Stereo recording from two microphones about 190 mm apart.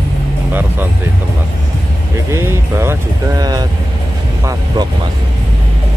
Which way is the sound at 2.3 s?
15° right (ahead or behind).